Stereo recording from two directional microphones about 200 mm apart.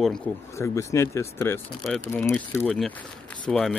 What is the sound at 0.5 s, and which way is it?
Speech, 15° left (ahead or behind).